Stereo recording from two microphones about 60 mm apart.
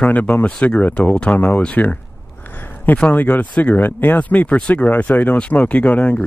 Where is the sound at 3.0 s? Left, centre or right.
Left.